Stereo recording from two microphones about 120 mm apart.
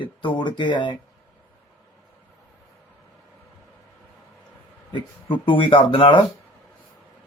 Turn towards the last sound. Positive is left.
turn(degrees=45)  # may be behind; listen again after turning